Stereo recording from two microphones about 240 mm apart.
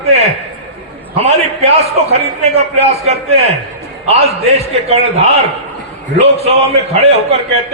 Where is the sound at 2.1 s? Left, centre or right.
Right.